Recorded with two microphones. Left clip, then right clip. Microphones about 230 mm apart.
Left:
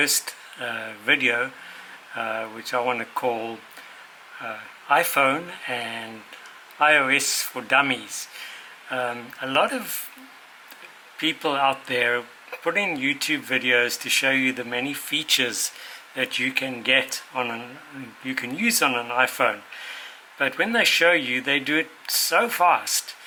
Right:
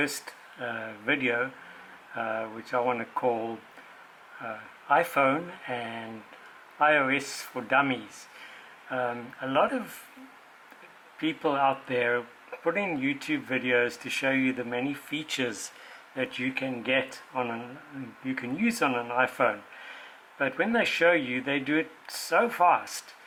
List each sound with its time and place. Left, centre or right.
0.0 s speech: centre
3.3 s speech: right
4.4 s speech: centre
11.2 s speech: centre